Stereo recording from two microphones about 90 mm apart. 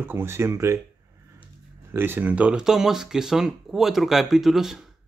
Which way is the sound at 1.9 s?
25° right (ahead or behind).